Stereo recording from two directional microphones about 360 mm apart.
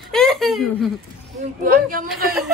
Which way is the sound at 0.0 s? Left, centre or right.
Centre.